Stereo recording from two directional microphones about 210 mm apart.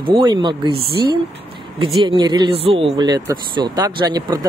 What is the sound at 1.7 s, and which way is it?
Speech, 25° right (ahead or behind).